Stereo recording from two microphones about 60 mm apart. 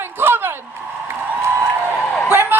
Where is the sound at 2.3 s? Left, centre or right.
Right.